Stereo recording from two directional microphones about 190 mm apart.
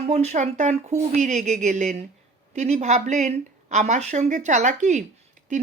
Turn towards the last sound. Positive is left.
turn(degrees=-40)  # may be behind; listen again after turning